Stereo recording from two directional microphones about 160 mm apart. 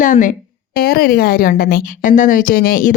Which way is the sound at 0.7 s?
70° left (ahead or behind).